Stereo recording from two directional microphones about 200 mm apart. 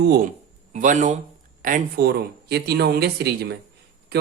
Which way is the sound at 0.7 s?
40° right (ahead or behind).